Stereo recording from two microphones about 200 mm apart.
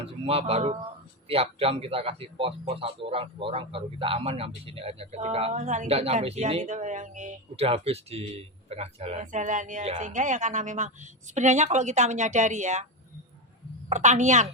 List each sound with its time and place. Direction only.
0.0 s a woman's voice: 30° right (ahead or behind)
13.9 s a woman's voice: 35° right (ahead or behind)